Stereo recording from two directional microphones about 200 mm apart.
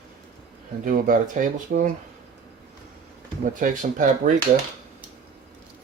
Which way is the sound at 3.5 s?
40° right (ahead or behind).